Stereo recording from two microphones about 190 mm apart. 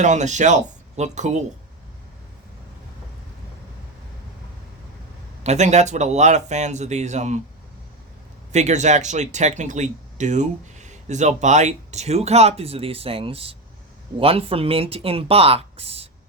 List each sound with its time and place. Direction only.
0.0 s speech: 40° right (ahead or behind)
5.4 s speech: 35° right (ahead or behind)
8.5 s speech: 40° right (ahead or behind)